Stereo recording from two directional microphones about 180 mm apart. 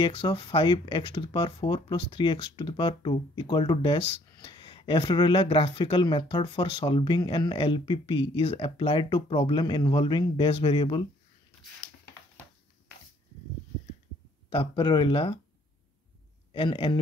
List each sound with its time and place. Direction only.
0.0 s speech: 30° left (ahead or behind)
14.5 s speech: 30° left (ahead or behind)
16.5 s speech: 30° left (ahead or behind)